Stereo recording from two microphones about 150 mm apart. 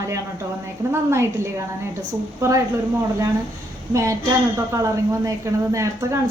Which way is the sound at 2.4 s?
20° right (ahead or behind).